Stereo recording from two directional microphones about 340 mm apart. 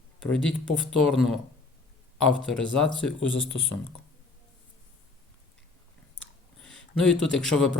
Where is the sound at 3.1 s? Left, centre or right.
Left.